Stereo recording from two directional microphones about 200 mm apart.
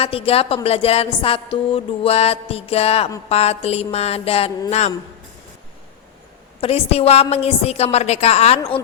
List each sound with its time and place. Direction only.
0.0 s a woman's voice: 30° left (ahead or behind)
6.6 s a woman's voice: 30° left (ahead or behind)